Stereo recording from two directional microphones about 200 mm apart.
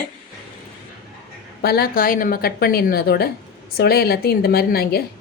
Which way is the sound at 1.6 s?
50° left (ahead or behind).